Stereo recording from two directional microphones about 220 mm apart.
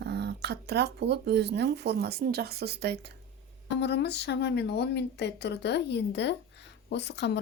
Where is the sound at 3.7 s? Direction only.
50° left (ahead or behind).